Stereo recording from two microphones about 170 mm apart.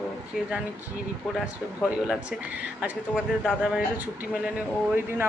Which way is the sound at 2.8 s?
5° right (ahead or behind).